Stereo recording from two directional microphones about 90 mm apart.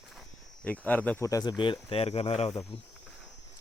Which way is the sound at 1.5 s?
65° left (ahead or behind).